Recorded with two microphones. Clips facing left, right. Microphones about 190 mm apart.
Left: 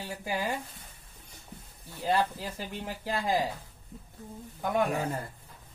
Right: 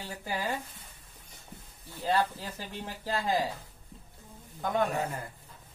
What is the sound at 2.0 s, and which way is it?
Speech, 10° left (ahead or behind).